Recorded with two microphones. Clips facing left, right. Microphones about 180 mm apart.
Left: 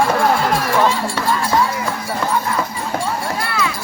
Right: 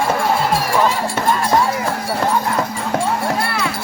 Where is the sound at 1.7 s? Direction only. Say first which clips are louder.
Right 3 dB; 55° right (ahead or behind).